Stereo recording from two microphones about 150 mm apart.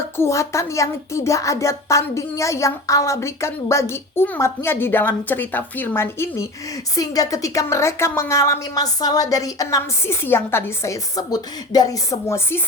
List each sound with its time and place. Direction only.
0.2 s a woman's voice: 20° left (ahead or behind)